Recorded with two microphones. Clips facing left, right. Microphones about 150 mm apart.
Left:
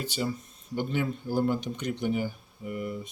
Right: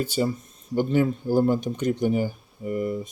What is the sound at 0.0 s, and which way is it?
Speech, 45° right (ahead or behind).